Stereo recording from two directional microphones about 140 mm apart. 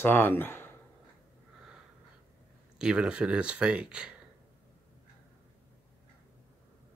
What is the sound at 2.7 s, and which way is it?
Speech, 5° right (ahead or behind).